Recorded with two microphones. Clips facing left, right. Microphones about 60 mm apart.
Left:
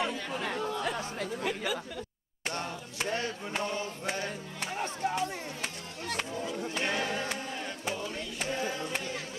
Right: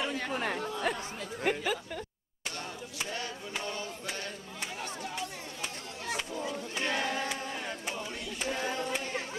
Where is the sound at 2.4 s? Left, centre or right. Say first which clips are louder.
Left 4 dB; left.